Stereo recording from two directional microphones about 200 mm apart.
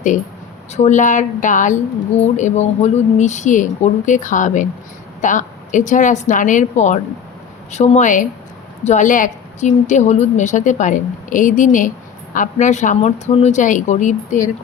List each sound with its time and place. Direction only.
0.7 s a woman's voice: 35° left (ahead or behind)